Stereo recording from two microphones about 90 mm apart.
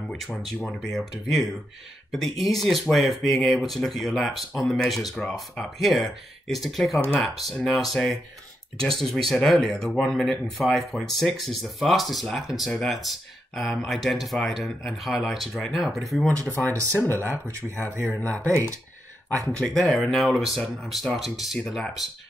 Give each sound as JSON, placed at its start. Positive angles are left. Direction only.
{"t": 0.1, "sound": "speech", "side_deg": 0}
{"t": 16.2, "sound": "speech", "side_deg": 20}
{"t": 17.5, "sound": "speech", "side_deg": -30}
{"t": 19.4, "sound": "speech", "side_deg": 0}